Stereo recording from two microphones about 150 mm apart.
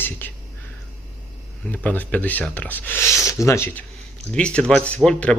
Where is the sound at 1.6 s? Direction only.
10° left (ahead or behind).